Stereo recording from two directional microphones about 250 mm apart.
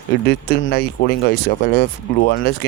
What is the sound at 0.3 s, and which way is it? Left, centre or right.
Speech, left.